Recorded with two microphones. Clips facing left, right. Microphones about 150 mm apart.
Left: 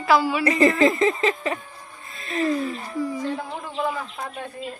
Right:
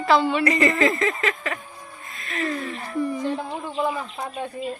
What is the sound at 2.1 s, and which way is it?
Music, 30° left (ahead or behind).